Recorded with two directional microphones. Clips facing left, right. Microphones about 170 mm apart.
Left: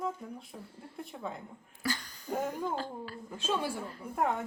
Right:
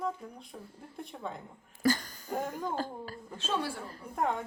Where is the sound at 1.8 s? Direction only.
45° right (ahead or behind).